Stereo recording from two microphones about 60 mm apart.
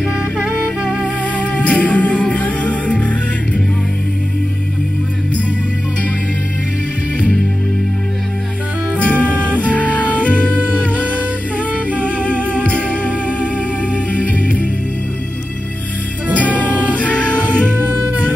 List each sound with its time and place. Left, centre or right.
1.0 s music: left
9.0 s music: left
9.3 s music: right
9.6 s music: left
12.5 s music: left
14.1 s music: left
16.3 s music: left
17.7 s music: right